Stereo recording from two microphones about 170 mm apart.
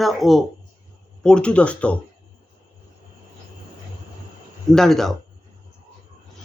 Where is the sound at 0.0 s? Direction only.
Centre (ahead or behind).